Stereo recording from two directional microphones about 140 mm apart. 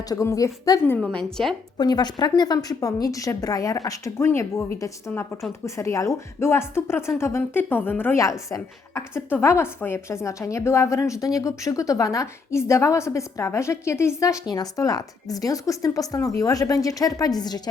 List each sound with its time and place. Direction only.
0.0 s a woman's voice: 25° left (ahead or behind)
0.9 s a woman's voice: 5° left (ahead or behind)
1.8 s a woman's voice: 30° left (ahead or behind)